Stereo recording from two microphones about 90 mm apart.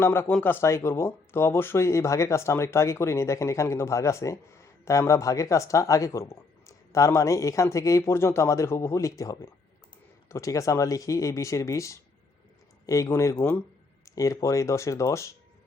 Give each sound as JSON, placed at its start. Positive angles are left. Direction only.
{"t": 0.0, "sound": "a man's voice", "side_deg": 25}